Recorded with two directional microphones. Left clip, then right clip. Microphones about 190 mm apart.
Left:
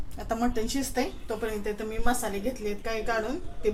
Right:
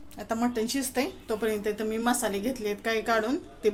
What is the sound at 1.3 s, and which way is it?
A woman's voice, 45° right (ahead or behind).